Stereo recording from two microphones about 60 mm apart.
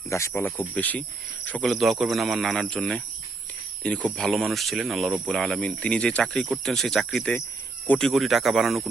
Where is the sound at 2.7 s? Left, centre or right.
Centre.